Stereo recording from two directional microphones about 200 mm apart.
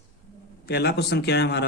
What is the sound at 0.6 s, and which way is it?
Speech, 55° left (ahead or behind).